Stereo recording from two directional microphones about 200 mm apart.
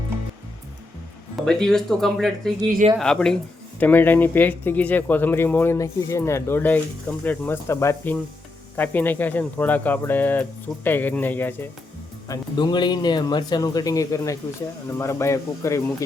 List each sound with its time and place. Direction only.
1.4 s speech: centre (ahead or behind)
12.3 s a man's voice: 20° left (ahead or behind)